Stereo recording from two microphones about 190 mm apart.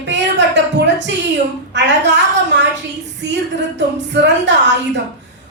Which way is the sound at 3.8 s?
70° right (ahead or behind).